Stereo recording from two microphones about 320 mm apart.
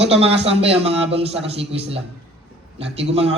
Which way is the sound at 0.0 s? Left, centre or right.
Centre.